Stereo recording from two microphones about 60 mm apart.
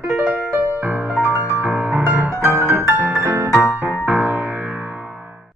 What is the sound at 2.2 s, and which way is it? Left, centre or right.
Music, right.